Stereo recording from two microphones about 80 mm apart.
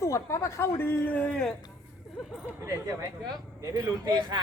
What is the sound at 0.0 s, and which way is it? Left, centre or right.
Speech, left.